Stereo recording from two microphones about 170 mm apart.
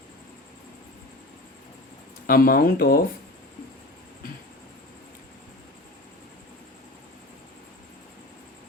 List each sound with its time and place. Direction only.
2.2 s speech: 55° left (ahead or behind)